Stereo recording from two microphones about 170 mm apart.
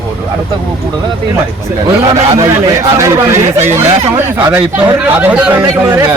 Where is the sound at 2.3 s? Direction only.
20° right (ahead or behind).